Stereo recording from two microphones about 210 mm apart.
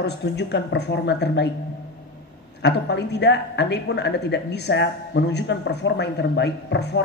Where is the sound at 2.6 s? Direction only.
55° left (ahead or behind).